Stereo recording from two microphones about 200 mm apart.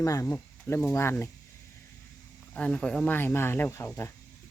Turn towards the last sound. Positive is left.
turn(degrees=15)  # may be behind; listen again after turning